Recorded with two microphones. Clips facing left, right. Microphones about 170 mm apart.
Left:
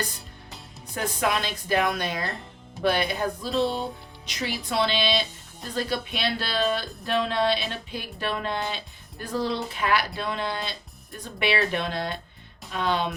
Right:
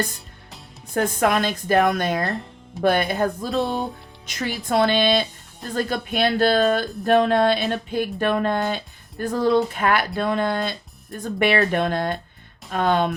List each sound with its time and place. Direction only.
0.9 s speech: 50° right (ahead or behind)